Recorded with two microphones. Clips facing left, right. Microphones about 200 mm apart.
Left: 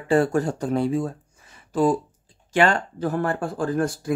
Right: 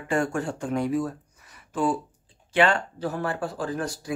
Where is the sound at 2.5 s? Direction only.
45° left (ahead or behind).